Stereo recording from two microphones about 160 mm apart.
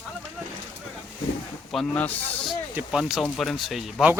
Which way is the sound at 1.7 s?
10° left (ahead or behind).